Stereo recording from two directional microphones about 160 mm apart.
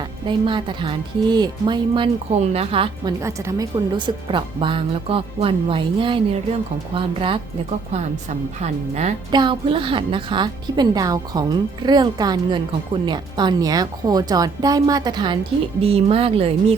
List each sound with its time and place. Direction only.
0.3 s a woman's voice: 30° right (ahead or behind)
2.4 s speech: 40° right (ahead or behind)
7.9 s a woman's voice: 45° right (ahead or behind)
9.3 s a woman's voice: 30° right (ahead or behind)